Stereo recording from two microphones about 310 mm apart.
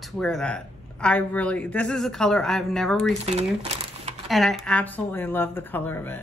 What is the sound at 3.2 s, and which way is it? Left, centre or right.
Speech, centre.